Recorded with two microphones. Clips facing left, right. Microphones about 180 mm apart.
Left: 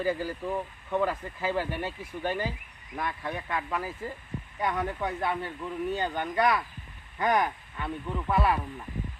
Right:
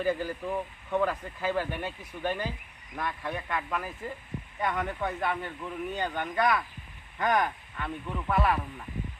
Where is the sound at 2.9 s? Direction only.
10° left (ahead or behind).